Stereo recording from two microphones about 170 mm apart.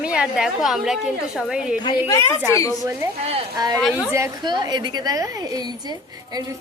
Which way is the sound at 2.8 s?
15° right (ahead or behind).